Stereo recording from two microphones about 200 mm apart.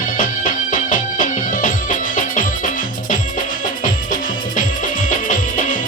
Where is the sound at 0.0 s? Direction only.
45° left (ahead or behind).